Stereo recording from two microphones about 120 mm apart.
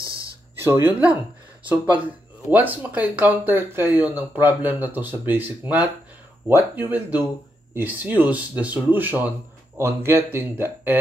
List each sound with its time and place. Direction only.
0.6 s speech: 20° right (ahead or behind)
2.5 s speech: 15° right (ahead or behind)